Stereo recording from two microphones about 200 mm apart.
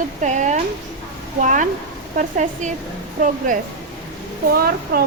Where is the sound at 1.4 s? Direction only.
40° right (ahead or behind).